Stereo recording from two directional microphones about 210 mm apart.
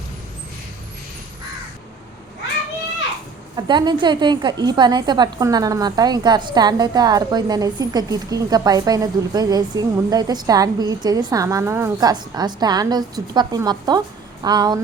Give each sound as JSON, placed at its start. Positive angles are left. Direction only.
{"t": 3.5, "sound": "a woman's voice", "side_deg": -20}